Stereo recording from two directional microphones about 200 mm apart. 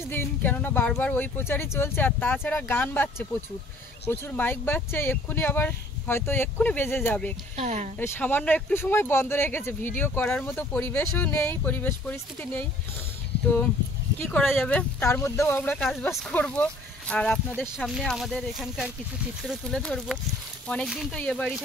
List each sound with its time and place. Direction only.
0.1 s speech: 10° left (ahead or behind)
7.5 s speech: 35° right (ahead or behind)
8.0 s speech: 10° left (ahead or behind)
14.2 s speech: 5° left (ahead or behind)